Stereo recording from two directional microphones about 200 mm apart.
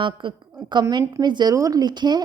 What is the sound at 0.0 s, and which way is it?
A woman's voice, 25° right (ahead or behind).